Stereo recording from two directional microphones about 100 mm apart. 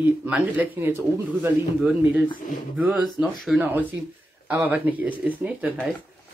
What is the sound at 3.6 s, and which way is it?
Speech, 15° right (ahead or behind).